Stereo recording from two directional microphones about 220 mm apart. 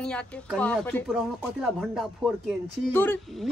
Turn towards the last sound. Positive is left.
turn(degrees=10)  # may be behind; listen again after turning